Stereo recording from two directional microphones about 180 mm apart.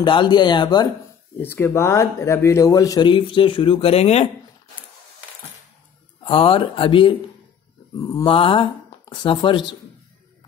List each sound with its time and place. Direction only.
0.0 s speech: 25° left (ahead or behind)
1.4 s speech: 10° left (ahead or behind); by 4.3 s 35° left (ahead or behind)
6.2 s speech: 30° left (ahead or behind)
8.0 s speech: 20° left (ahead or behind)